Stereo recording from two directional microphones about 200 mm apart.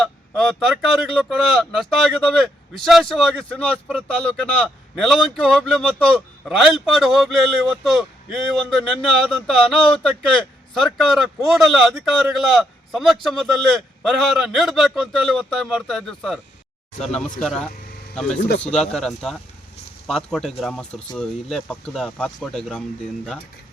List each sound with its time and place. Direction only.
0.0 s speech: centre (ahead or behind)
18.3 s speech: 60° left (ahead or behind)
18.6 s speech: 5° left (ahead or behind)